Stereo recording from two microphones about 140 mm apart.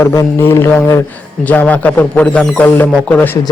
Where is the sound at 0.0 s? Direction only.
20° left (ahead or behind).